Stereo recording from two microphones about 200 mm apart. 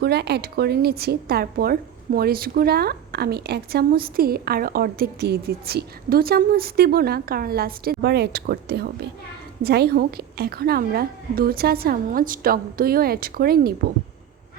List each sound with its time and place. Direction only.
0.0 s a woman's voice: 55° right (ahead or behind)